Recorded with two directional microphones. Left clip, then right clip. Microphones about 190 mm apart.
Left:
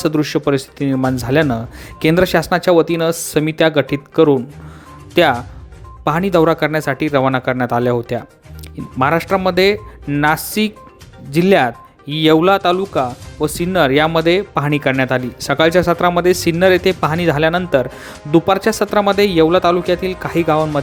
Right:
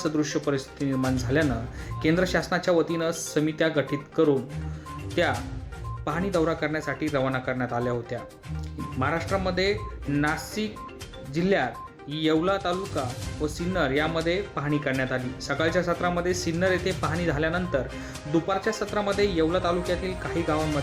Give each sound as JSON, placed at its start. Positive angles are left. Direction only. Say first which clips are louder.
{"t": 0.0, "sound": "speech", "louder": "left 10 dB", "side_deg": 50}